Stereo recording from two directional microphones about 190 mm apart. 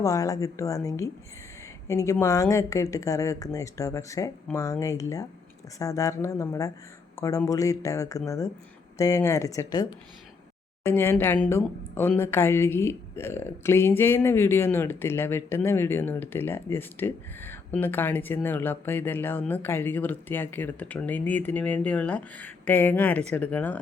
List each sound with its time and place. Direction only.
0.0 s a woman's voice: 15° left (ahead or behind)
10.8 s a woman's voice: 10° left (ahead or behind)